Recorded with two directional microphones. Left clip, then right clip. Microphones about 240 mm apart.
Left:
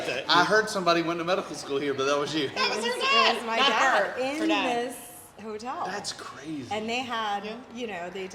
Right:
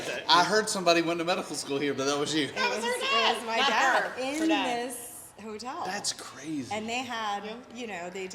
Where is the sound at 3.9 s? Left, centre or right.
Right.